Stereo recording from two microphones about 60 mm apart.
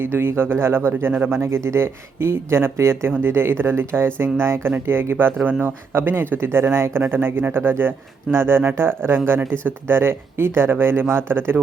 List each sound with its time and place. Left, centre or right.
0.0 s speech: right